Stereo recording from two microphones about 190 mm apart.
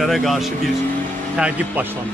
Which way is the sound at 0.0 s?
Centre (ahead or behind).